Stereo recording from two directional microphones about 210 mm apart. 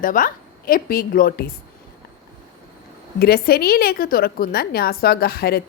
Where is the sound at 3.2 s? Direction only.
45° left (ahead or behind).